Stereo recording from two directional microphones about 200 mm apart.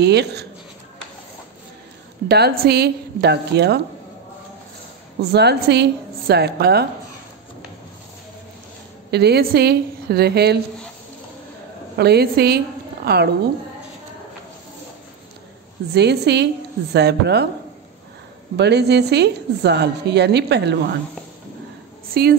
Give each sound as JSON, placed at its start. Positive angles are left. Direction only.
{"t": 0.0, "sound": "a woman's voice", "side_deg": -55}
{"t": 2.2, "sound": "a woman's voice", "side_deg": -55}
{"t": 5.3, "sound": "a woman's voice", "side_deg": -55}
{"t": 9.1, "sound": "a woman's voice", "side_deg": -55}
{"t": 12.0, "sound": "a woman's voice", "side_deg": -55}
{"t": 15.9, "sound": "a woman's voice", "side_deg": -55}
{"t": 18.6, "sound": "a woman's voice", "side_deg": -55}
{"t": 22.2, "sound": "a woman's voice", "side_deg": -50}